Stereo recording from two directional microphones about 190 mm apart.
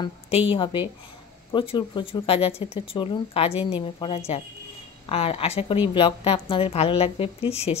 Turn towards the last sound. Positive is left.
turn(degrees=30)  # may be behind; listen again after turning